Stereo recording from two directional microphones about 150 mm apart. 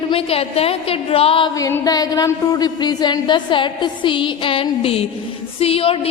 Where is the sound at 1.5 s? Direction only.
20° left (ahead or behind); by 6.1 s 40° left (ahead or behind).